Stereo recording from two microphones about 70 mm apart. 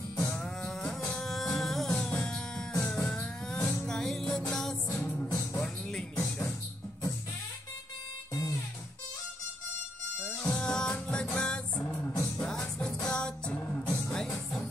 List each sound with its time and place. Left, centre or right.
0.2 s music: centre
1.9 s music: centre
3.8 s music: centre
5.4 s music: left
10.2 s music: centre